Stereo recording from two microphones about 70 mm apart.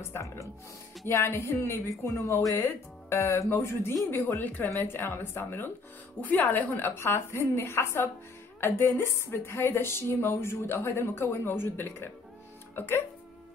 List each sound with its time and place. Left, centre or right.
1.0 s a woman's voice: left